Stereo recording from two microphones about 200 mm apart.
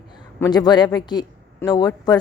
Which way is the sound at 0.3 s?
15° left (ahead or behind).